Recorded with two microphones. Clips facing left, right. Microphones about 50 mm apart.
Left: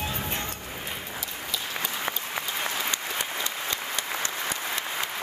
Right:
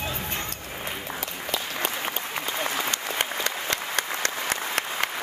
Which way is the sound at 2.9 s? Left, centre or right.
Right.